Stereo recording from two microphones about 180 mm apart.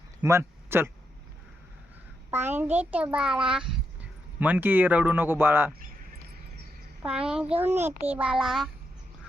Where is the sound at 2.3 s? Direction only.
10° right (ahead or behind).